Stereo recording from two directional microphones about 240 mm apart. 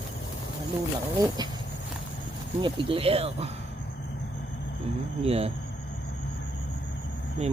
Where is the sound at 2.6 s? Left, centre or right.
Right.